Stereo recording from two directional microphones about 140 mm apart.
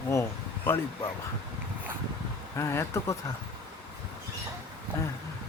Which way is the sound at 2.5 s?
20° left (ahead or behind).